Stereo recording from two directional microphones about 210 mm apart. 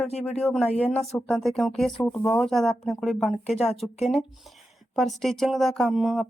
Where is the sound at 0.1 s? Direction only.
30° left (ahead or behind).